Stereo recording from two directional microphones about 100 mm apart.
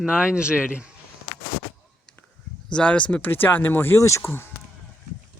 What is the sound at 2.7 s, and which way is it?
Speech, 10° left (ahead or behind).